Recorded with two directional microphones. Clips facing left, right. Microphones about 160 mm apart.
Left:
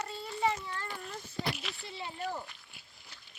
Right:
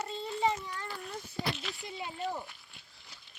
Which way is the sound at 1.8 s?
15° right (ahead or behind).